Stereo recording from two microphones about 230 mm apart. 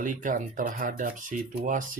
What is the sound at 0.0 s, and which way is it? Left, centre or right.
Speech, right.